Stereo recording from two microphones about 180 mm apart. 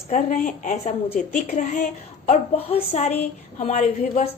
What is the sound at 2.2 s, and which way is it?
A woman's voice, 35° left (ahead or behind).